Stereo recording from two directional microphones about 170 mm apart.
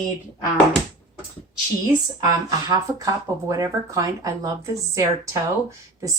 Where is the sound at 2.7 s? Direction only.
20° right (ahead or behind).